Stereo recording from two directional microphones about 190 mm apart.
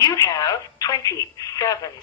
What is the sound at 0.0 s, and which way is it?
Speech, 20° left (ahead or behind).